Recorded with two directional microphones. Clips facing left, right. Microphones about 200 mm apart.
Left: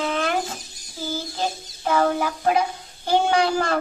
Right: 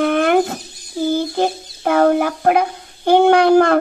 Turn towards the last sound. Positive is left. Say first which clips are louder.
# right 10 dB
turn(degrees=-55)  # may be behind; listen again after turning